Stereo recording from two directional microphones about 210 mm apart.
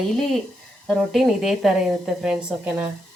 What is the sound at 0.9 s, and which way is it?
A woman's voice, centre (ahead or behind).